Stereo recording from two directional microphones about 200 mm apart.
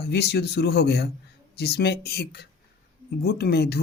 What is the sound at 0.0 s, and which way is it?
Speech, 55° left (ahead or behind).